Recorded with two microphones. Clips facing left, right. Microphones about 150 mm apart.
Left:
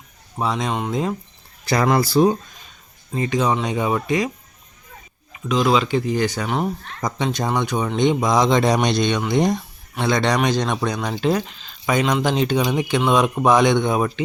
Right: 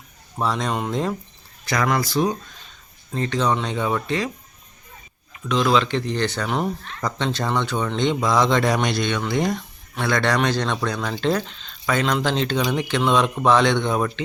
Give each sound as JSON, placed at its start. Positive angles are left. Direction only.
{"t": 0.3, "sound": "speech", "side_deg": 5}
{"t": 1.6, "sound": "speech", "side_deg": 30}
{"t": 3.1, "sound": "speech", "side_deg": 10}
{"t": 5.5, "sound": "speech", "side_deg": 10}
{"t": 7.0, "sound": "speech", "side_deg": 15}